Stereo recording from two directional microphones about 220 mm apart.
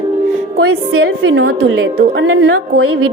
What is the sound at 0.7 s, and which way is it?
Speech, 70° right (ahead or behind).